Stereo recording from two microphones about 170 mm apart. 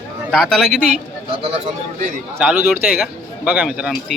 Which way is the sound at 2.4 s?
5° right (ahead or behind).